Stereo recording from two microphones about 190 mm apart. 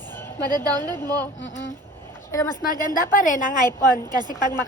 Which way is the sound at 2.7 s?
45° left (ahead or behind).